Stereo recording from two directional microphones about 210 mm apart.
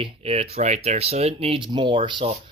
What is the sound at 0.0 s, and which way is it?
Speech, 25° right (ahead or behind).